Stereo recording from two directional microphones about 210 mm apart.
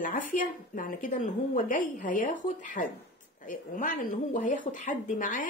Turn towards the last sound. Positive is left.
turn(degrees=40)  # may be behind; listen again after turning